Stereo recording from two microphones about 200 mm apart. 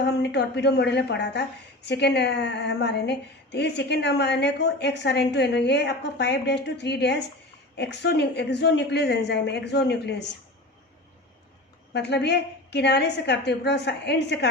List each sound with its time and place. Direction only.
0.0 s a woman's voice: 55° left (ahead or behind)
11.9 s a woman's voice: 60° left (ahead or behind)